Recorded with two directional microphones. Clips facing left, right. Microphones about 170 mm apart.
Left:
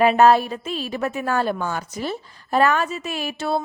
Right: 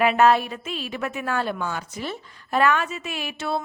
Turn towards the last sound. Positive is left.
turn(degrees=40)  # may be behind; listen again after turning